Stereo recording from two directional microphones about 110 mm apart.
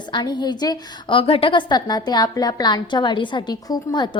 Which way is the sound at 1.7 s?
40° left (ahead or behind).